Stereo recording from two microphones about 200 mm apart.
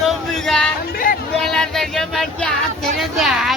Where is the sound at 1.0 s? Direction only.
45° left (ahead or behind).